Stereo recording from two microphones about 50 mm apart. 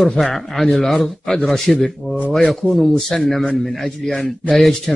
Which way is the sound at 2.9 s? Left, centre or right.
Centre.